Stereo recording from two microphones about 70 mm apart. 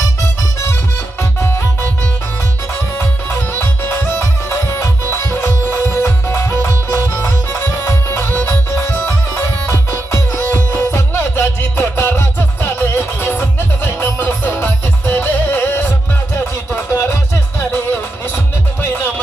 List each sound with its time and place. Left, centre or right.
1.2 s music: left
3.0 s music: left